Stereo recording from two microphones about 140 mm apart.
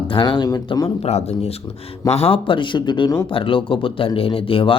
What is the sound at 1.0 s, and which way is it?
Speech, 50° left (ahead or behind).